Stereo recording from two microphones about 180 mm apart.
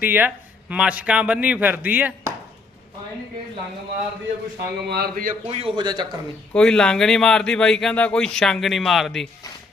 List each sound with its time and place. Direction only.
0.0 s a man's voice: 10° right (ahead or behind)
4.9 s a man's voice: 60° right (ahead or behind)
5.5 s a man's voice: 35° right (ahead or behind)
6.5 s speech: 5° left (ahead or behind)